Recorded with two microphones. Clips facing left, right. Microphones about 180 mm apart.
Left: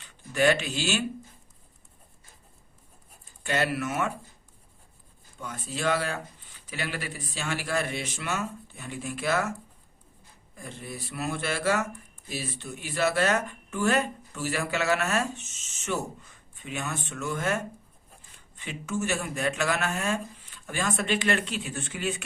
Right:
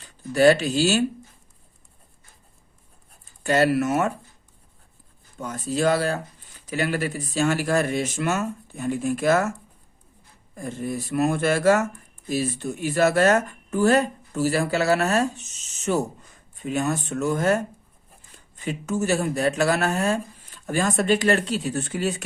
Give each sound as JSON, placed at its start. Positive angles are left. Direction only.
{"t": 0.0, "sound": "speech", "side_deg": -35}
{"t": 3.4, "sound": "speech", "side_deg": -40}
{"t": 5.4, "sound": "speech", "side_deg": -40}
{"t": 10.5, "sound": "speech", "side_deg": -45}